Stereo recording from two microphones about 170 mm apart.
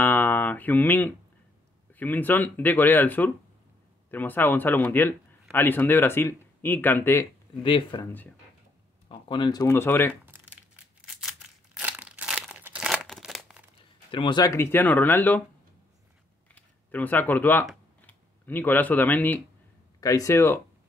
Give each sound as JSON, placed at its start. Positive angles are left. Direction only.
{"t": 0.0, "sound": "a man's voice", "side_deg": 10}
{"t": 7.6, "sound": "speech", "side_deg": 30}
{"t": 9.3, "sound": "speech", "side_deg": 25}
{"t": 9.7, "sound": "a man's voice", "side_deg": 15}
{"t": 10.2, "sound": "a sound", "side_deg": -10}
{"t": 11.8, "sound": "crumpling", "side_deg": -10}
{"t": 14.1, "sound": "a man's voice", "side_deg": 25}
{"t": 16.5, "sound": "a man's voice", "side_deg": 10}